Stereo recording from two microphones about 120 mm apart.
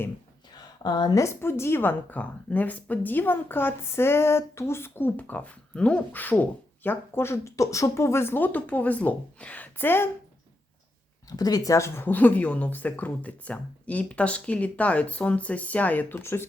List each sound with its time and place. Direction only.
0.8 s a woman's voice: 35° left (ahead or behind); by 10.1 s 15° left (ahead or behind)
11.3 s a woman's voice: 30° left (ahead or behind)